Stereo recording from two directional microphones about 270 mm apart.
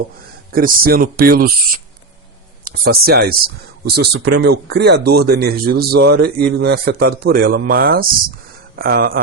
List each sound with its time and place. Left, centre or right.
0.5 s speech: right
2.6 s a sound: right
3.0 s speech: right